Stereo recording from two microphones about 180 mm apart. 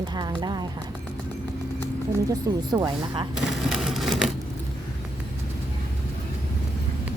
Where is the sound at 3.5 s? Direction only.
Centre (ahead or behind).